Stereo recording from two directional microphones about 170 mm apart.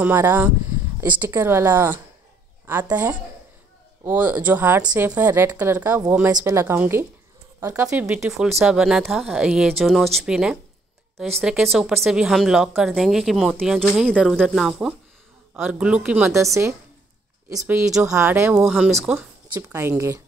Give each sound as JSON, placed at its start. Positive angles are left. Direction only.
{"t": 0.0, "sound": "speech", "side_deg": -10}
{"t": 7.9, "sound": "speech", "side_deg": -5}
{"t": 17.5, "sound": "speech", "side_deg": -15}
{"t": 19.5, "sound": "speech", "side_deg": -20}